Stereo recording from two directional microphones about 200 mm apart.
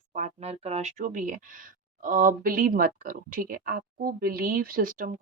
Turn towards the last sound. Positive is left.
turn(degrees=-40)  # may be behind; listen again after turning